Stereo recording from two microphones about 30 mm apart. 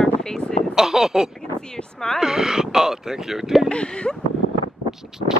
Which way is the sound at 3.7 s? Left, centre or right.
Left.